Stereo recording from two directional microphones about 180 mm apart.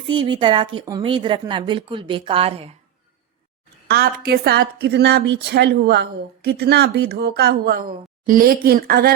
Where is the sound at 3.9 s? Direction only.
60° right (ahead or behind).